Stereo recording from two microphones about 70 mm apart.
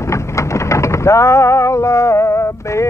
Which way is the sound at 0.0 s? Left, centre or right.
Left.